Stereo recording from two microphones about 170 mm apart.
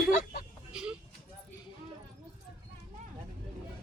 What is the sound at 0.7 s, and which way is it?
Vehicle, 5° right (ahead or behind).